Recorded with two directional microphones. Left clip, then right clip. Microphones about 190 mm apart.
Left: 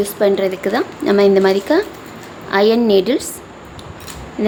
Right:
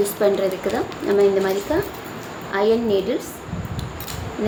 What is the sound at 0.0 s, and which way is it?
A woman's voice, 35° left (ahead or behind).